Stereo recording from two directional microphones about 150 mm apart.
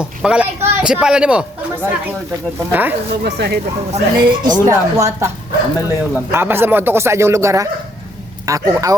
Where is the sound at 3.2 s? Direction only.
90° right.